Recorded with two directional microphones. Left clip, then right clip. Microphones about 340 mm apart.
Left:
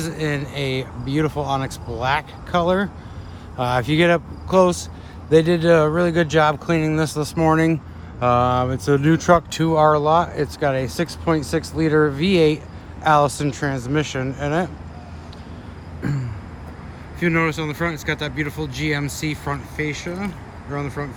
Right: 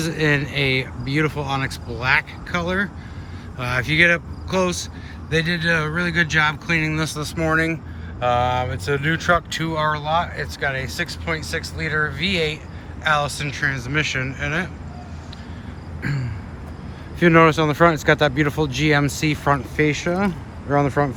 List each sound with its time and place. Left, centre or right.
0.0 s speech: centre
16.0 s a sound: centre
17.2 s speech: centre